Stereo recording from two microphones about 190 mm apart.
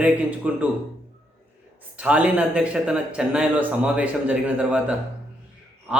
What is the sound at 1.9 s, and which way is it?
A man's voice, 5° right (ahead or behind).